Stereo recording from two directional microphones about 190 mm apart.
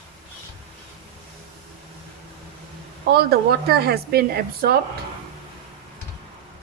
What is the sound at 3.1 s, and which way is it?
Speech, 55° right (ahead or behind).